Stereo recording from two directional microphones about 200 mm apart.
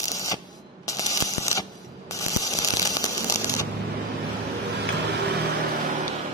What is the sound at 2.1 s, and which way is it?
Ratchet, 15° left (ahead or behind).